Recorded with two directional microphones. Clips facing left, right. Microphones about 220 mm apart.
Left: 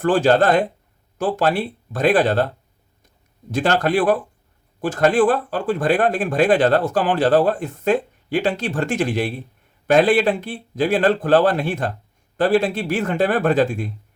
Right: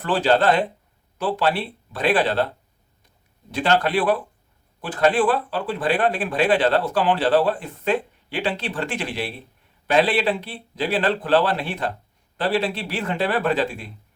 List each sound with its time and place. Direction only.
0.0 s speech: 45° left (ahead or behind)
3.5 s speech: 45° left (ahead or behind)